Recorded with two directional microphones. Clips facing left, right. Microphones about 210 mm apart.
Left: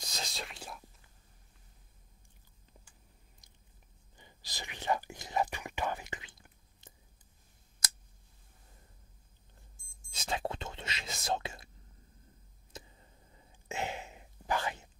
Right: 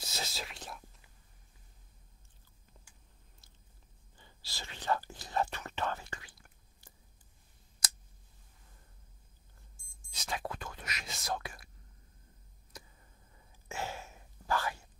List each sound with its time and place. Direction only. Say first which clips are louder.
0.0 s speech: right 1 dB; 5° right (ahead or behind)
3.4 s biting: even; 15° left (ahead or behind)
4.2 s speech: left 2 dB; 15° left (ahead or behind)
10.1 s speech: left 3 dB; 25° left (ahead or behind)
12.7 s a sound: left 3 dB; 25° left (ahead or behind)